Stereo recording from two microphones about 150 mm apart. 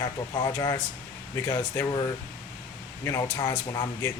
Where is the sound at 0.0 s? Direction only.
25° left (ahead or behind).